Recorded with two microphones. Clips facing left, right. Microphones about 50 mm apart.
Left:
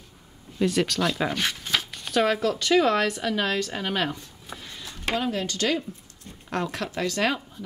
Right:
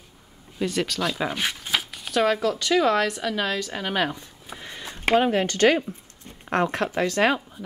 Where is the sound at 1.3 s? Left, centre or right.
Centre.